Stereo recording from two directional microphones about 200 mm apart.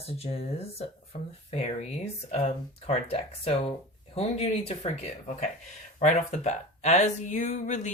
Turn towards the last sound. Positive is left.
turn(degrees=35)  # may be behind; listen again after turning